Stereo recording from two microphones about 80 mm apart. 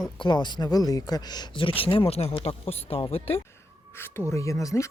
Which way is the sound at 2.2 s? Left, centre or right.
Left.